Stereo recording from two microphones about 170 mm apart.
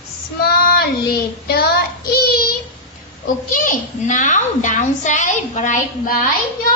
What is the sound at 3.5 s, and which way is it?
A child's voice, 55° left (ahead or behind).